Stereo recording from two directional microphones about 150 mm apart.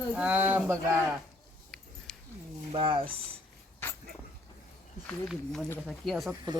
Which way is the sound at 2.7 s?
35° right (ahead or behind).